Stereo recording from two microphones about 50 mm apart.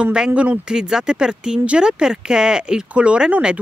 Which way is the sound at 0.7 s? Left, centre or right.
Centre.